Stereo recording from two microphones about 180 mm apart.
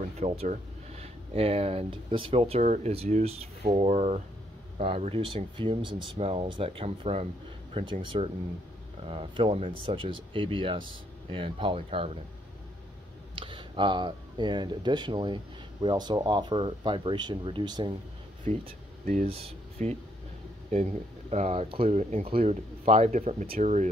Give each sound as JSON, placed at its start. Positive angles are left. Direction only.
{"t": 0.2, "sound": "speech", "side_deg": -35}
{"t": 13.4, "sound": "speech", "side_deg": -30}
{"t": 19.8, "sound": "speech", "side_deg": -40}